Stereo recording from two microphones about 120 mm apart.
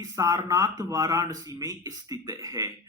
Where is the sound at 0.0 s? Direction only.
30° right (ahead or behind).